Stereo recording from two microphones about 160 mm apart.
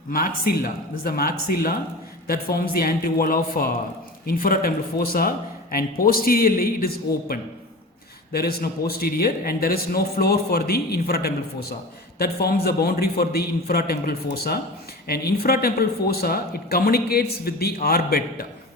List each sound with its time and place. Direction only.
0.1 s speech: 65° left (ahead or behind)